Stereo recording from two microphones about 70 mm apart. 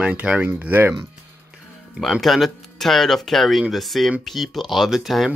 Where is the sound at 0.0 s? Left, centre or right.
Centre.